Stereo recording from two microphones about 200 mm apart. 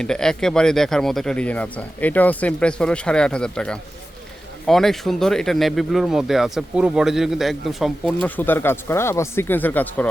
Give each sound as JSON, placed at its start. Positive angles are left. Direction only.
{"t": 0.0, "sound": "speech", "side_deg": 5}